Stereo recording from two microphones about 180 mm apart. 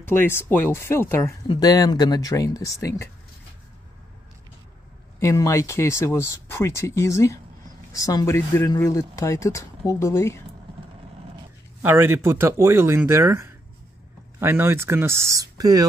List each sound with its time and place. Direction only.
0.1 s speech: 10° left (ahead or behind)
5.2 s speech: 15° left (ahead or behind)
11.8 s speech: 15° right (ahead or behind)